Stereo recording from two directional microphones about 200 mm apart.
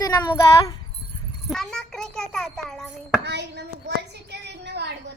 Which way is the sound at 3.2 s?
55° right (ahead or behind).